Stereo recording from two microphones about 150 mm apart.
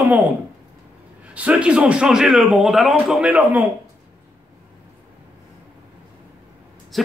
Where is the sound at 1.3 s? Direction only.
10° right (ahead or behind).